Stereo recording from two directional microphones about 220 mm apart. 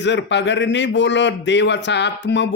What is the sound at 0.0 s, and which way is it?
A man's voice, 55° left (ahead or behind).